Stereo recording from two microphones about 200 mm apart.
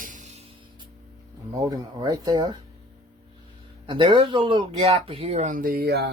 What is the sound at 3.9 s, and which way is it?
Speech, 25° right (ahead or behind).